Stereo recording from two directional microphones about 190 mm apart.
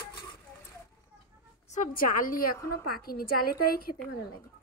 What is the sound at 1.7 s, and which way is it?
A woman's voice, 45° left (ahead or behind).